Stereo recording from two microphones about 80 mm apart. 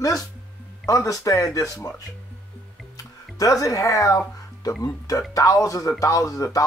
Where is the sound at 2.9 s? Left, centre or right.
Left.